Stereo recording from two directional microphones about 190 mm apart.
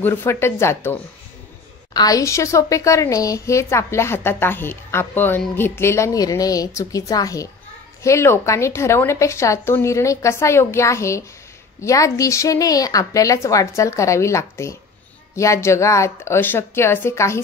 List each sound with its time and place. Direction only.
0.0 s a woman's voice: 10° left (ahead or behind)